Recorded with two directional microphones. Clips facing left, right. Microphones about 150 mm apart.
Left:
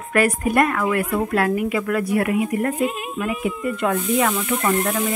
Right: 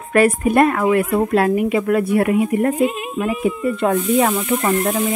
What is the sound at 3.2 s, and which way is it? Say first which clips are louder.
A woman's voice: right 5 dB; 30° right (ahead or behind).